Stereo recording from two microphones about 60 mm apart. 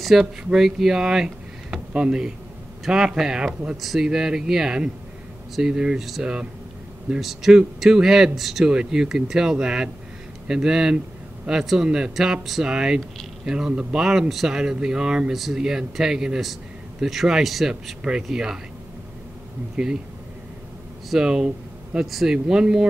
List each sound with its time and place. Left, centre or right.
0.0 s speech: centre
7.2 s a man's voice: centre
19.7 s speech: centre
21.1 s speech: centre